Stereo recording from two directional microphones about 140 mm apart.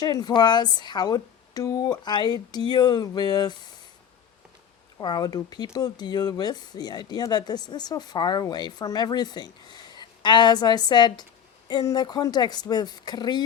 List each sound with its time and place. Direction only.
0.0 s speech: 30° left (ahead or behind)
4.9 s speech: 30° left (ahead or behind)